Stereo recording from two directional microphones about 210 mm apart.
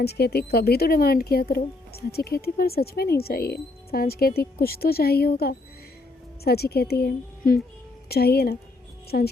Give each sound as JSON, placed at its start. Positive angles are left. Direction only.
{"t": 0.0, "sound": "speech", "side_deg": 50}